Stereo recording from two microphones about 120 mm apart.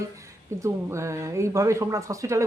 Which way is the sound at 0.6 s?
25° right (ahead or behind).